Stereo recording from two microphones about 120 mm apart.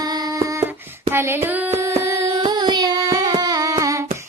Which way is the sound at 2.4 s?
35° right (ahead or behind).